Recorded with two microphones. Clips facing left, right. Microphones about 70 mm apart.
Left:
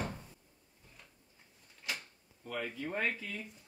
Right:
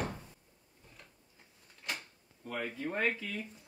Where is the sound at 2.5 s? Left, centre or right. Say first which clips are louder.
Right 1 dB; centre.